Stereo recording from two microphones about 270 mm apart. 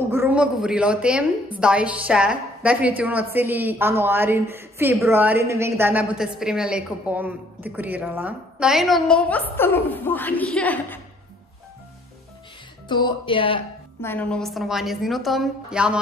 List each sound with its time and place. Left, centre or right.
0.1 s a woman's voice: centre
12.8 s speech: centre
14.0 s a woman's voice: centre